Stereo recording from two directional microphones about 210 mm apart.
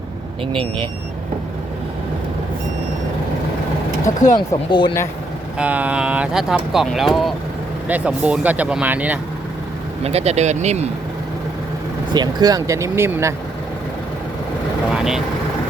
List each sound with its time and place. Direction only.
4.4 s speech: 20° left (ahead or behind)
5.5 s speech: 5° right (ahead or behind)
10.0 s speech: 30° right (ahead or behind)
12.1 s speech: 20° right (ahead or behind)
14.9 s speech: centre (ahead or behind)